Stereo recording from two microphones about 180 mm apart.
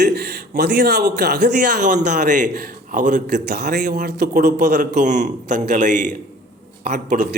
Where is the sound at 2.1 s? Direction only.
45° right (ahead or behind).